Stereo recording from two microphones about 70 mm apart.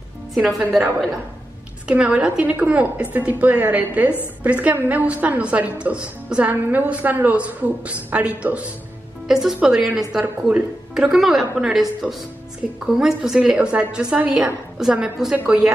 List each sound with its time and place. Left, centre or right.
0.3 s a woman's voice: centre
1.9 s a woman's voice: centre
9.3 s a woman's voice: centre
14.3 s a woman's voice: centre
15.3 s a woman's voice: centre